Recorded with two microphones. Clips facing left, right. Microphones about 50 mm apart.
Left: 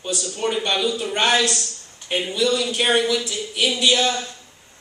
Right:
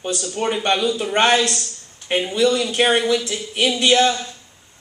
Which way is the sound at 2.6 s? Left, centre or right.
Right.